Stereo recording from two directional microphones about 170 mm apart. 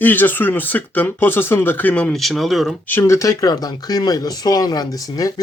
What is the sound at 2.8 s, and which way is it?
Speech, 15° left (ahead or behind).